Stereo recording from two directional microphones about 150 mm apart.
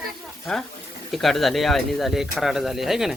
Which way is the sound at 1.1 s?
Centre (ahead or behind).